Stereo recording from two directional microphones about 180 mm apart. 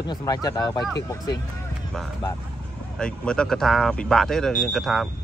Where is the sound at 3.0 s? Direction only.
5° left (ahead or behind).